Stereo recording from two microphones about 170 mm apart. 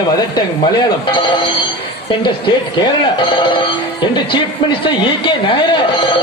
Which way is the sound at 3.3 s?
30° left (ahead or behind).